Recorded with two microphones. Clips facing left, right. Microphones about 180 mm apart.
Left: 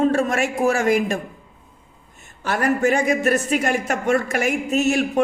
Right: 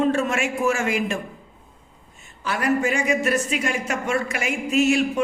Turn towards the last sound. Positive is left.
turn(degrees=45)  # may be behind; listen again after turning